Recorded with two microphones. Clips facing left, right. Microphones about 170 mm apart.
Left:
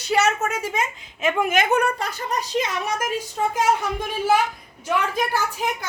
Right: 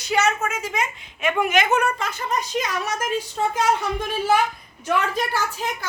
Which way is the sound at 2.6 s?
15° left (ahead or behind).